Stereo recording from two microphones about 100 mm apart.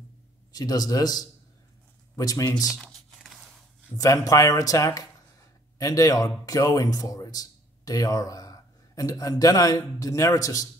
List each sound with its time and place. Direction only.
0.5 s speech: 40° left (ahead or behind)
4.0 s a man's voice: 35° left (ahead or behind)